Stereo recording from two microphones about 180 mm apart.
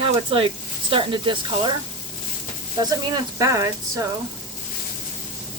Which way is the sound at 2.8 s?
20° right (ahead or behind).